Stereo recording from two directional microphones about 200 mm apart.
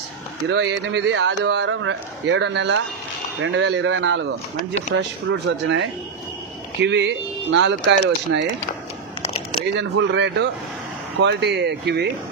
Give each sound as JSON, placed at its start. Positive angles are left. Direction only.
{"t": 0.5, "sound": "speech", "side_deg": -65}
{"t": 9.8, "sound": "speech", "side_deg": -60}